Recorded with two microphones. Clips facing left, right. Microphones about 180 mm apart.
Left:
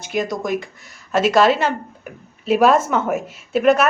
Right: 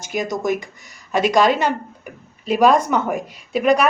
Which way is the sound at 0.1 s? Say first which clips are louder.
Even; centre (ahead or behind).